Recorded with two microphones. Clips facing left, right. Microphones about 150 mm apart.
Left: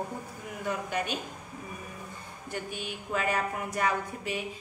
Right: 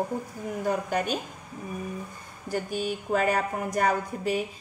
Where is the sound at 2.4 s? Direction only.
40° right (ahead or behind).